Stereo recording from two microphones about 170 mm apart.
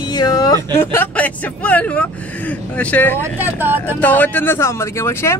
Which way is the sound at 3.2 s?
10° right (ahead or behind).